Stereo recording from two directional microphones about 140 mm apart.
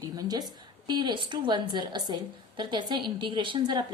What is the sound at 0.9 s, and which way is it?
A woman's voice, 30° right (ahead or behind).